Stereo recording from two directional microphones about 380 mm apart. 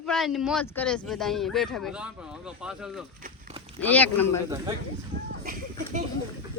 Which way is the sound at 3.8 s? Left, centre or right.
Centre.